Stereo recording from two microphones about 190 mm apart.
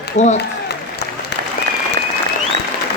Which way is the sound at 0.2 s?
35° left (ahead or behind).